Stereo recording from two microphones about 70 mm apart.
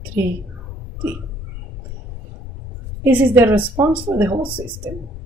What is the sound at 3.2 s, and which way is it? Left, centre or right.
A woman's voice, right.